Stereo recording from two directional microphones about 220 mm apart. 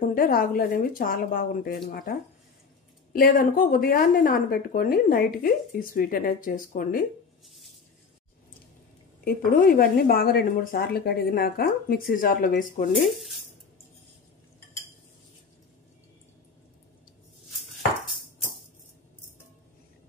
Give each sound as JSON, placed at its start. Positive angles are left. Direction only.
{"t": 0.1, "sound": "speech", "side_deg": 40}
{"t": 9.2, "sound": "speech", "side_deg": 40}